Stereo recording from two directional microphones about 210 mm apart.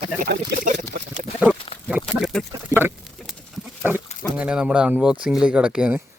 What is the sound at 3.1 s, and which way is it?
Pig, centre (ahead or behind).